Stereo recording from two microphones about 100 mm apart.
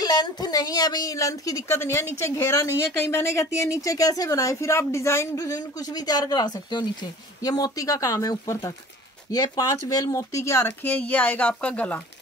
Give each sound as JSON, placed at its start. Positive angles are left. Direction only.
{"t": 0.0, "sound": "a woman's voice", "side_deg": 40}
{"t": 1.8, "sound": "a woman's voice", "side_deg": 25}